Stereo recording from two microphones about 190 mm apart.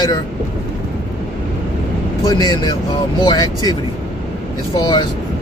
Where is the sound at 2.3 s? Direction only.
20° left (ahead or behind).